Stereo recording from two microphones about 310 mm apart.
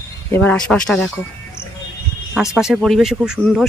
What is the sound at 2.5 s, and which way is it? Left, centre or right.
Speech, centre.